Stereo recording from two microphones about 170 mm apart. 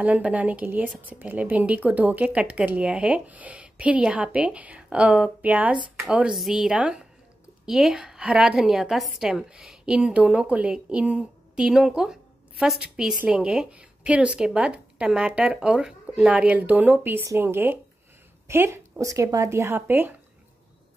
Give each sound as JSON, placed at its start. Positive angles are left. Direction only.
{"t": 0.0, "sound": "a woman's voice", "side_deg": -10}